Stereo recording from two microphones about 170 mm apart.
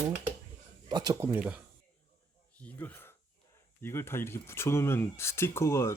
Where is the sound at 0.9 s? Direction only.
25° right (ahead or behind); by 1.6 s 10° right (ahead or behind).